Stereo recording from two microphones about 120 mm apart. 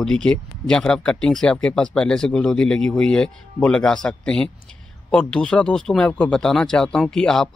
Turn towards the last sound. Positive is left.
turn(degrees=5)  # may be behind; listen again after turning